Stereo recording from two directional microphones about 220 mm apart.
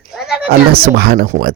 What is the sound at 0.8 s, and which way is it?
Speech, 45° right (ahead or behind).